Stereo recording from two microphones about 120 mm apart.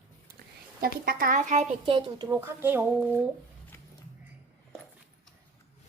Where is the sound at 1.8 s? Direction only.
40° right (ahead or behind).